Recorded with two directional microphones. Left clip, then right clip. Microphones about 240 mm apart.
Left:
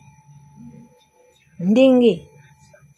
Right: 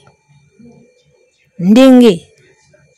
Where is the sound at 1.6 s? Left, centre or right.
Right.